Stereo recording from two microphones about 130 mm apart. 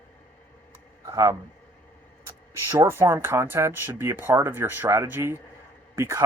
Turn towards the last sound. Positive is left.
turn(degrees=-20)  # may be behind; listen again after turning